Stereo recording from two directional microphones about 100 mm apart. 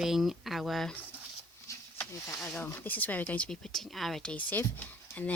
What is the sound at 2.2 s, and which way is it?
Speech, 25° left (ahead or behind).